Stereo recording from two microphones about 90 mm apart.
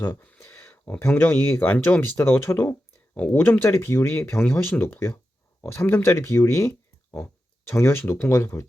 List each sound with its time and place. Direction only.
0.0 s speech: 20° left (ahead or behind)